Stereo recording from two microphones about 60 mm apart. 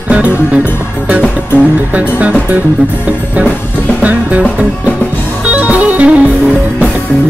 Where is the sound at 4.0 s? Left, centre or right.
Right.